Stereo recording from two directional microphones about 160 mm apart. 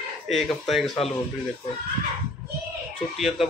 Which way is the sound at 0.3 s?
Centre (ahead or behind).